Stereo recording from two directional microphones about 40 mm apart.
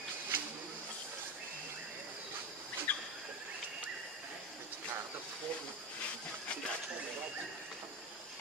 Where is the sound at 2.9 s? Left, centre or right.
Left.